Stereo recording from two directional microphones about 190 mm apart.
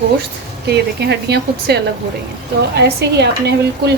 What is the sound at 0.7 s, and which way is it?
Speech, 60° right (ahead or behind).